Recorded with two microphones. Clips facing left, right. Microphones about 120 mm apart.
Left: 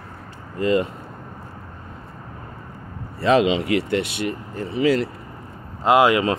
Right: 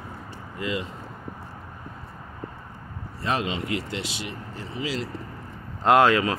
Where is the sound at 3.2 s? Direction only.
90° left; by 5.1 s 60° left (ahead or behind).